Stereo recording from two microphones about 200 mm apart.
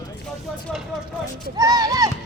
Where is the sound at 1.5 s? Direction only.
20° right (ahead or behind).